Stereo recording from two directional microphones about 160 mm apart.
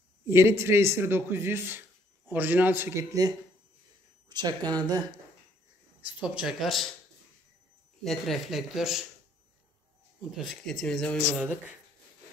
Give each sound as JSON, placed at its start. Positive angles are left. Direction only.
{"t": 0.3, "sound": "speech", "side_deg": -15}
{"t": 6.1, "sound": "speech", "side_deg": -5}
{"t": 8.0, "sound": "speech", "side_deg": 0}
{"t": 10.3, "sound": "speech", "side_deg": 0}